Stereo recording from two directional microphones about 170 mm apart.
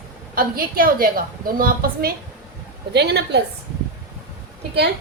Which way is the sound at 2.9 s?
80° right.